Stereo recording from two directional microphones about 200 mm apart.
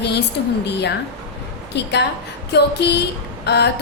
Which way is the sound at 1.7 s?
60° left (ahead or behind).